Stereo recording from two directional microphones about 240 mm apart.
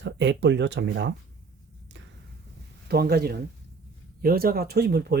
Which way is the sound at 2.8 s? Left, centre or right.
Right.